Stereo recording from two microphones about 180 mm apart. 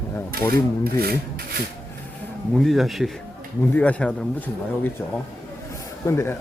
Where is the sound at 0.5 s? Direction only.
55° right (ahead or behind).